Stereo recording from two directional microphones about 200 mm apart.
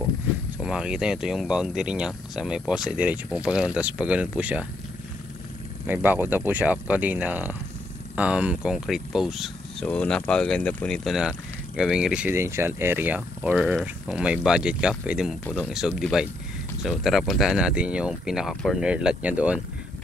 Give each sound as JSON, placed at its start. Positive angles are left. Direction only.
{"t": 0.6, "sound": "speech", "side_deg": -5}
{"t": 5.9, "sound": "speech", "side_deg": -10}